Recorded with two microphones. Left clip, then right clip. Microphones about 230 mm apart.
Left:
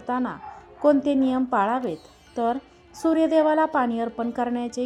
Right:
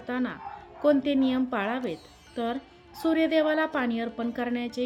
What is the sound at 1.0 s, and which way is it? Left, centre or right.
Speech, centre.